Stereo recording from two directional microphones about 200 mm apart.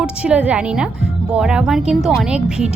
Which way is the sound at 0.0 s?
5° right (ahead or behind).